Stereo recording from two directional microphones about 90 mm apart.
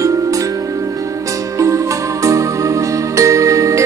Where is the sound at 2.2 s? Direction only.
35° right (ahead or behind).